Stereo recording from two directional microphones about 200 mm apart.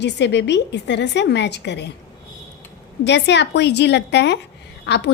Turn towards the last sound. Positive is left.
turn(degrees=60)  # may be behind; listen again after turning